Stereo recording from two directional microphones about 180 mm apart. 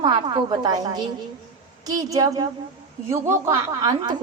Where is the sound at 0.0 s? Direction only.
25° right (ahead or behind).